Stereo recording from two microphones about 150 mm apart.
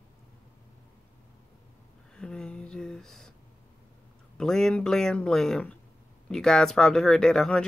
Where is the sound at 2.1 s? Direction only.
5° left (ahead or behind).